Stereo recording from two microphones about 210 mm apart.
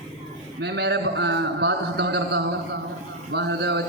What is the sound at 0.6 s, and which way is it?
A woman's voice, 55° right (ahead or behind).